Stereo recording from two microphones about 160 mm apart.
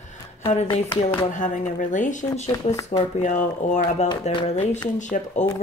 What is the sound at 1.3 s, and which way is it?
Speech, 50° left (ahead or behind).